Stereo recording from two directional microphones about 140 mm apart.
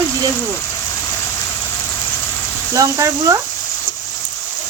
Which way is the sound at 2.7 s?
25° right (ahead or behind).